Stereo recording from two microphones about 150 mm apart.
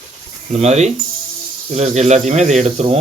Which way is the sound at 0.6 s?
50° right (ahead or behind).